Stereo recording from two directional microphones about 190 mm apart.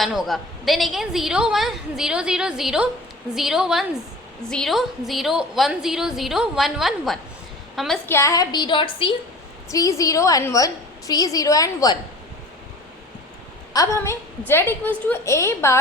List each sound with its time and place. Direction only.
0.0 s a woman's voice: centre (ahead or behind)
8.1 s a woman's voice: 15° left (ahead or behind)
13.7 s a woman's voice: 15° left (ahead or behind)